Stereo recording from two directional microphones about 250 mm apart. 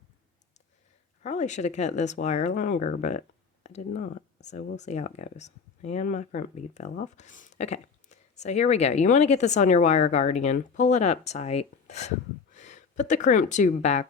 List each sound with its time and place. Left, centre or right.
1.2 s speech: left